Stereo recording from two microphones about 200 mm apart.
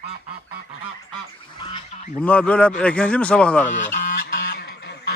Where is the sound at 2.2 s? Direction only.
5° left (ahead or behind).